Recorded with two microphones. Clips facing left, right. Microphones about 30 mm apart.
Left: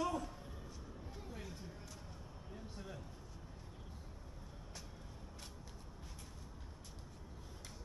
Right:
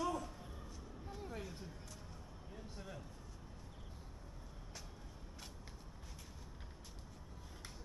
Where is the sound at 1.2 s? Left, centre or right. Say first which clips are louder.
Right 4 dB; centre.